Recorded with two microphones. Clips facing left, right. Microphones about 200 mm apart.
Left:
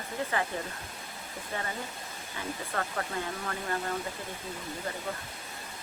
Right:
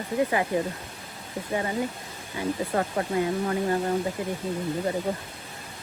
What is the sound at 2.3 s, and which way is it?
Speech, 25° right (ahead or behind).